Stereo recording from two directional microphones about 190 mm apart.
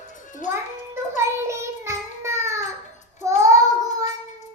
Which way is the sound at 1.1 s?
15° right (ahead or behind).